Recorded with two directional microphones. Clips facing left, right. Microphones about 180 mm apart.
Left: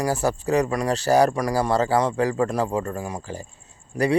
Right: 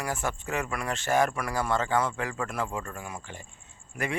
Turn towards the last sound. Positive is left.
turn(degrees=35)  # may be behind; listen again after turning